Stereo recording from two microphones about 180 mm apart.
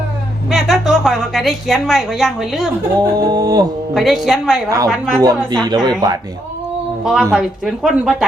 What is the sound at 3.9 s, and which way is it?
Speech, centre (ahead or behind).